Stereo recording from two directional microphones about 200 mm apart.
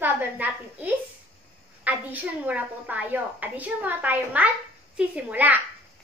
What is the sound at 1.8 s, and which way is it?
A woman's voice, 10° right (ahead or behind).